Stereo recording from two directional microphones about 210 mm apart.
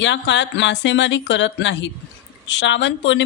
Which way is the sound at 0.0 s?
60° left (ahead or behind).